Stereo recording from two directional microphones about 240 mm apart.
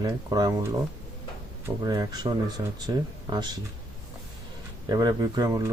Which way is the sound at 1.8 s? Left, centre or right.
Centre.